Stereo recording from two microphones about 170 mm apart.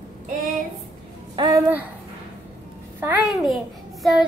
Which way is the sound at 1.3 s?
25° right (ahead or behind).